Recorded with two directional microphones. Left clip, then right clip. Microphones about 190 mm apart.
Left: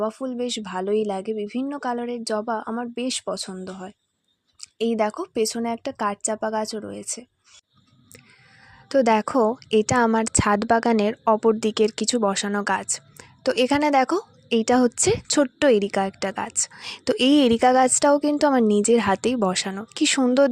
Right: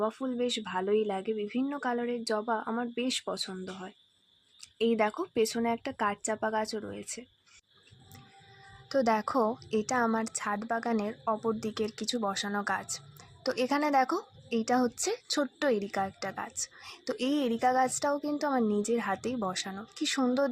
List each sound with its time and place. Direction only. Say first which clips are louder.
0.0 s speech: left 5 dB; 30° left (ahead or behind)
8.9 s a woman's voice: left 9 dB; 45° left (ahead or behind)